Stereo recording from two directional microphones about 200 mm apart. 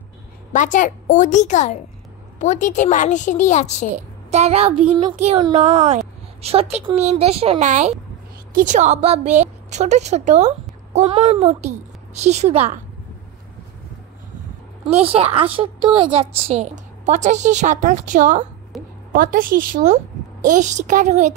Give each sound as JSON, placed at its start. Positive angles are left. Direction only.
{"t": 0.5, "sound": "a woman's voice", "side_deg": 40}
{"t": 3.9, "sound": "a woman's voice", "side_deg": -35}
{"t": 14.9, "sound": "a woman's voice", "side_deg": -30}